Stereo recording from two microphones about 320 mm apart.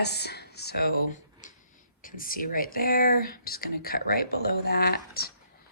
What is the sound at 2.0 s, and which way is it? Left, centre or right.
Speech, left.